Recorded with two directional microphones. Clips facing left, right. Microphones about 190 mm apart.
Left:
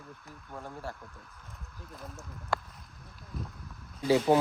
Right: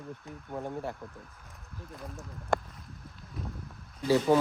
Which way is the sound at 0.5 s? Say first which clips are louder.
Right 7 dB; 25° right (ahead or behind).